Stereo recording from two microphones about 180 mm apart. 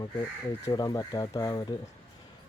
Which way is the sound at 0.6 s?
20° left (ahead or behind).